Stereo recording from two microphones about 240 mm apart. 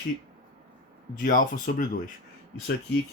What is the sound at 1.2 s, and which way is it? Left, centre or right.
Speech, left.